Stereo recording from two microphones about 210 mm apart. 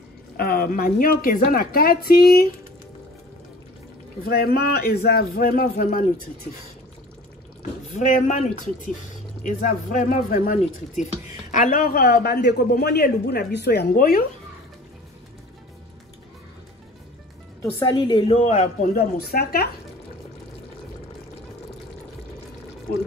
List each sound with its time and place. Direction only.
0.4 s speech: 45° left (ahead or behind)
4.2 s speech: 45° left (ahead or behind)
7.9 s a woman's voice: 35° left (ahead or behind)
17.6 s a woman's voice: 20° left (ahead or behind); by 19.7 s 45° left (ahead or behind)